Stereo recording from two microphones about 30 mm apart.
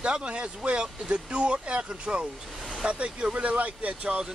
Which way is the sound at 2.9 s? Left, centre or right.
Right.